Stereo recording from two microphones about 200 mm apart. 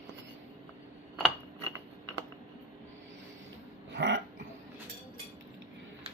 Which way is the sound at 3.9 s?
65° right (ahead or behind).